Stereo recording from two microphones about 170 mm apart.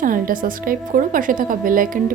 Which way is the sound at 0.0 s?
55° right (ahead or behind).